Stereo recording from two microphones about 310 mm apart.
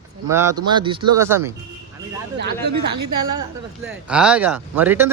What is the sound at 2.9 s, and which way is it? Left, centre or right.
Speech, right.